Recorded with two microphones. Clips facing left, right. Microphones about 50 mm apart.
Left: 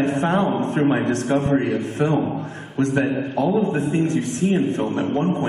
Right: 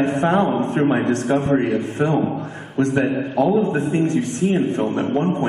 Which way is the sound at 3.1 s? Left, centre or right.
Right.